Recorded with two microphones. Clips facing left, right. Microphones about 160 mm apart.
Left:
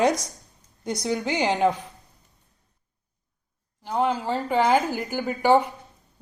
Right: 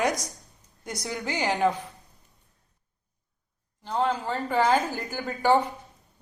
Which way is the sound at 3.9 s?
15° left (ahead or behind).